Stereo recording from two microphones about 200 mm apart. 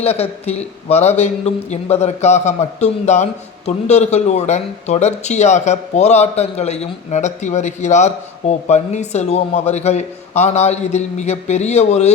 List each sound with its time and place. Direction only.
0.0 s speech: 30° left (ahead or behind)